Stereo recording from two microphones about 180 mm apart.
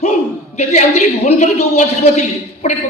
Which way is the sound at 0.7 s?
40° left (ahead or behind).